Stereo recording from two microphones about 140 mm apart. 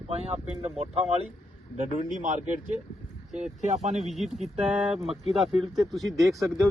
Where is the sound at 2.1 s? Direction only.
65° right (ahead or behind).